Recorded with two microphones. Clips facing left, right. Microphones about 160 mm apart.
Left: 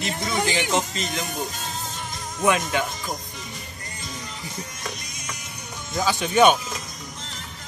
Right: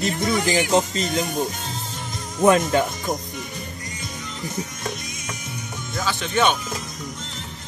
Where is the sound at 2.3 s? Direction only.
40° right (ahead or behind).